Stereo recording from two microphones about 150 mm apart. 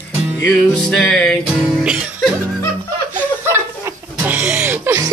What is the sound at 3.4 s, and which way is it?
Music, 20° right (ahead or behind).